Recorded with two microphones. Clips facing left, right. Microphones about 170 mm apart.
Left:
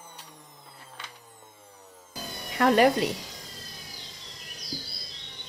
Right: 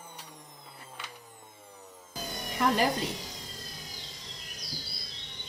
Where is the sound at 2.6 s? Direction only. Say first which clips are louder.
Left 5 dB; 65° left (ahead or behind).